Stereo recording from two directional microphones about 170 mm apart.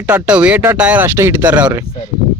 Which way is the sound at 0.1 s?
5° right (ahead or behind).